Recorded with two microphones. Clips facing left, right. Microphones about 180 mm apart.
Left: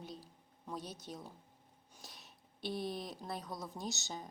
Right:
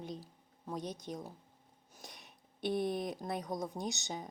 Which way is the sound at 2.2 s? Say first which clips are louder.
Right 6 dB; 55° right (ahead or behind).